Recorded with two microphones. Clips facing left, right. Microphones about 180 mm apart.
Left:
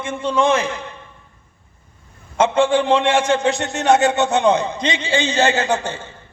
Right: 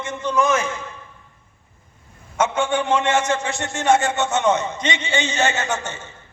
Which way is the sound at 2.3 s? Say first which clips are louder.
Left 5 dB; 30° left (ahead or behind).